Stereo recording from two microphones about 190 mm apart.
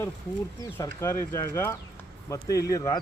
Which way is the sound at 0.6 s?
15° left (ahead or behind).